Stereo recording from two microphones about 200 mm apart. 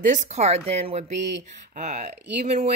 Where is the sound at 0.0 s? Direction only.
40° right (ahead or behind).